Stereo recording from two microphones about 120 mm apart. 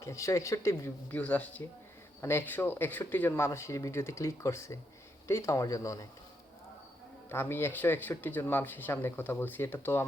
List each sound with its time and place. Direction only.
0.0 s speech: 25° left (ahead or behind)
7.3 s speech: 20° left (ahead or behind)